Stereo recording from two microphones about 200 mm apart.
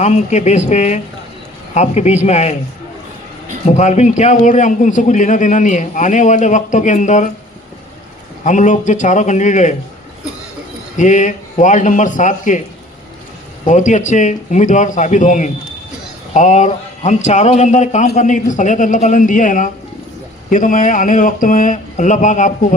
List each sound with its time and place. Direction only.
0.0 s a man's voice: 35° left (ahead or behind)
3.7 s a man's voice: 35° left (ahead or behind)
8.4 s a man's voice: 40° left (ahead or behind)
10.9 s a man's voice: 40° left (ahead or behind)
13.7 s a man's voice: 40° left (ahead or behind)